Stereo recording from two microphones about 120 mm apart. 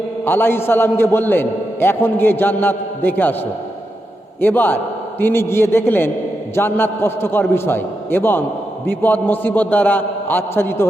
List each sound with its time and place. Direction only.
0.3 s a man's voice: 20° left (ahead or behind)
4.4 s a man's voice: 15° left (ahead or behind)